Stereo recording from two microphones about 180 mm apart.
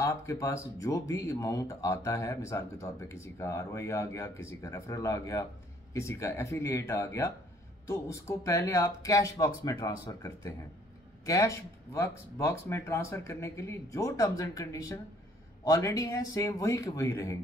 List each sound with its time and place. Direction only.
0.0 s speech: 15° left (ahead or behind)